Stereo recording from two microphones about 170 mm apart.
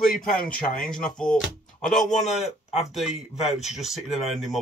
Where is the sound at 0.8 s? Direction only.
5° left (ahead or behind).